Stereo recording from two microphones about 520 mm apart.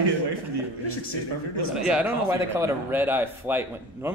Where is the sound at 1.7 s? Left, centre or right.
Centre.